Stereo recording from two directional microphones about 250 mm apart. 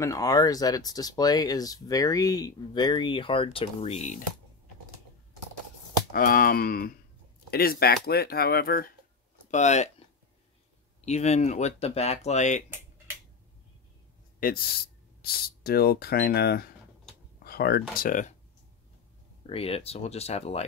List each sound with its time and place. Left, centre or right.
0.0 s speech: centre
6.1 s speech: left
11.1 s speech: left
12.6 s tick-tock: centre
14.4 s speech: left
19.4 s speech: left